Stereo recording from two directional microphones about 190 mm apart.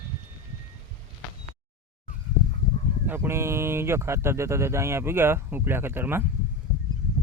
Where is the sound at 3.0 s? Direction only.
10° right (ahead or behind).